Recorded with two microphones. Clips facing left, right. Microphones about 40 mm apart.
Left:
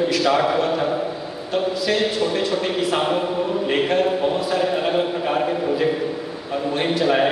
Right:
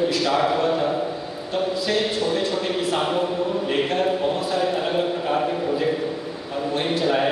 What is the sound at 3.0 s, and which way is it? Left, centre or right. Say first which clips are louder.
Chant: left 2 dB; centre.